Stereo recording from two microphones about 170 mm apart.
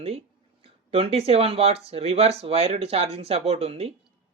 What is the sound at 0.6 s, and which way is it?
Speech, 35° right (ahead or behind).